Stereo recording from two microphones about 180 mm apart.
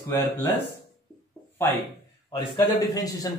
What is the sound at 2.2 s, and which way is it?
A man's voice, 20° left (ahead or behind).